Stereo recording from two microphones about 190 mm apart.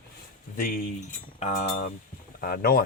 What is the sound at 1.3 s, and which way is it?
Cutlery, 40° left (ahead or behind).